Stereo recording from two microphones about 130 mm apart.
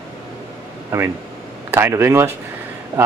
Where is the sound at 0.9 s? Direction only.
20° right (ahead or behind).